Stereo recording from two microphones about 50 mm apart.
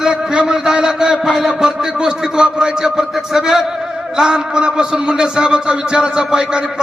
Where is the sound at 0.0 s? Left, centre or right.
Centre.